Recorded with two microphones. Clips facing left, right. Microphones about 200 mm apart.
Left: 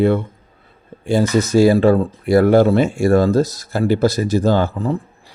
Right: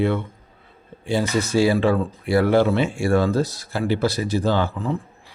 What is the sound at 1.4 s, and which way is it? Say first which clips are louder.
A man's voice: left 6 dB; 45° left (ahead or behind).